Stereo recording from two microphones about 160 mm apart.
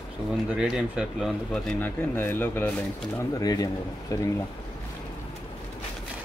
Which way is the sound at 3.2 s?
25° left (ahead or behind).